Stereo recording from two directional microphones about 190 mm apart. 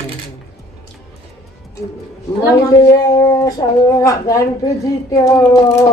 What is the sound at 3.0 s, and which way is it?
A woman's voice, 20° left (ahead or behind).